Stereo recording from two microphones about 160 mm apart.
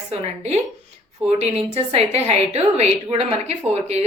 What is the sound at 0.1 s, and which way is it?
A woman's voice, 45° right (ahead or behind).